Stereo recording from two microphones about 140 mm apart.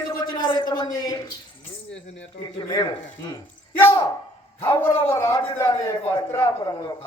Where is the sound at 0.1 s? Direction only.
30° left (ahead or behind).